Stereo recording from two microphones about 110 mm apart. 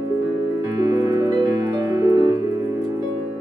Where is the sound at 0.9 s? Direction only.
30° right (ahead or behind).